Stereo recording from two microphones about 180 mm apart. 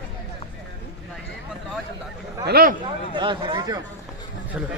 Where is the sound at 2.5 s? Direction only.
55° right (ahead or behind).